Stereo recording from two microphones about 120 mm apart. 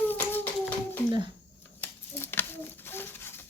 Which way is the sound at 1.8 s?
20° left (ahead or behind).